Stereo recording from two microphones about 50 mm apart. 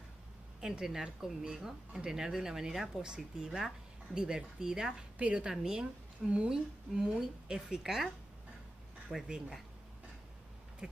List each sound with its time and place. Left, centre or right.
0.6 s a woman's voice: centre
6.5 s a woman's voice: centre
9.1 s a woman's voice: centre
10.8 s a sound: centre